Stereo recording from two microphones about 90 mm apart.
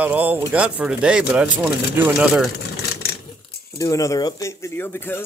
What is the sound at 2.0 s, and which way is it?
Speech, 20° right (ahead or behind).